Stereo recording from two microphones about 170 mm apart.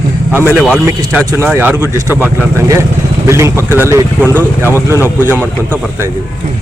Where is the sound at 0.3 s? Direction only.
10° right (ahead or behind).